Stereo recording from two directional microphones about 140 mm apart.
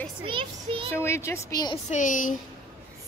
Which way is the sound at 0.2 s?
40° right (ahead or behind).